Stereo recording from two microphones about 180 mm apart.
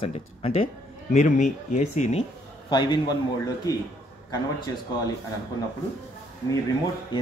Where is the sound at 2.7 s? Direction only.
25° left (ahead or behind).